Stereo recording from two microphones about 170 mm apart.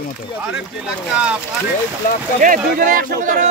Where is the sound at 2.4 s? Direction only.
55° right (ahead or behind).